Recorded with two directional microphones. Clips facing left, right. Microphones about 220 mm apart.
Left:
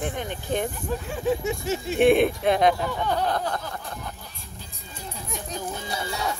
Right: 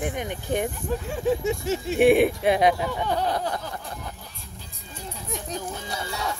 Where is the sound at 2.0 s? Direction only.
10° right (ahead or behind).